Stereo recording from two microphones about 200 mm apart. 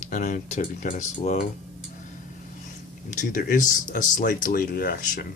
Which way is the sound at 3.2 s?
40° left (ahead or behind).